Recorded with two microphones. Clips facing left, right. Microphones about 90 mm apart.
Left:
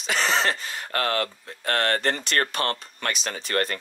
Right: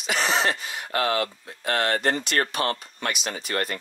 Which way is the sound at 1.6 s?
45° left (ahead or behind).